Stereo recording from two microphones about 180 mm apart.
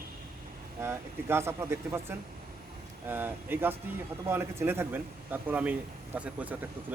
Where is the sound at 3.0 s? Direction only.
10° right (ahead or behind).